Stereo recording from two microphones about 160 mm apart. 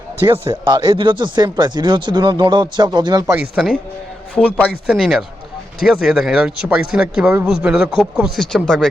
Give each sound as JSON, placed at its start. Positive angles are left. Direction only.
{"t": 0.2, "sound": "a man's voice", "side_deg": -15}
{"t": 0.6, "sound": "speech", "side_deg": -30}
{"t": 3.6, "sound": "speech", "side_deg": 0}